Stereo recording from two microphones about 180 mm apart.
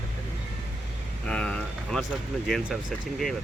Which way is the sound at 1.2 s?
5° left (ahead or behind).